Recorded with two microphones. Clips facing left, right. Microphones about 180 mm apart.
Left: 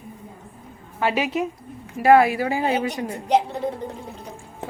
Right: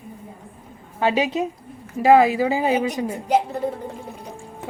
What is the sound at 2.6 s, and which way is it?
Speech, 15° right (ahead or behind).